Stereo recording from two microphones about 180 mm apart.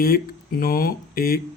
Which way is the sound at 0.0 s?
55° left (ahead or behind).